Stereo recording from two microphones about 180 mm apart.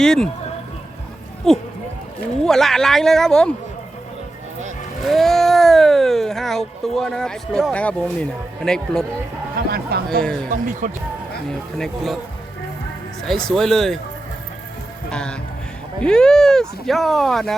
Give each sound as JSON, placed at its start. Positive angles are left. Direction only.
{"t": 0.0, "sound": "speech", "side_deg": 5}
{"t": 1.5, "sound": "speech", "side_deg": 5}
{"t": 5.0, "sound": "speech", "side_deg": 0}
{"t": 9.6, "sound": "speech", "side_deg": -60}
{"t": 10.2, "sound": "speech", "side_deg": 5}
{"t": 10.5, "sound": "speech", "side_deg": -45}
{"t": 11.8, "sound": "speech", "side_deg": 0}
{"t": 13.2, "sound": "speech", "side_deg": 0}
{"t": 15.1, "sound": "speech", "side_deg": 5}